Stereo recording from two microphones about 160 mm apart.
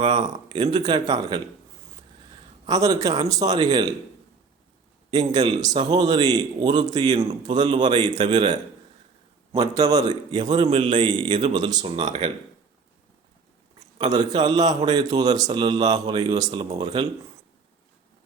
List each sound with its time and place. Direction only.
0.0 s a man's voice: 30° right (ahead or behind)
2.6 s a man's voice: 25° right (ahead or behind)
5.1 s a man's voice: 25° right (ahead or behind)
7.2 s a man's voice: 40° right (ahead or behind)
7.5 s a man's voice: 30° right (ahead or behind)
10.5 s a man's voice: 35° right (ahead or behind)
14.1 s a man's voice: 25° right (ahead or behind)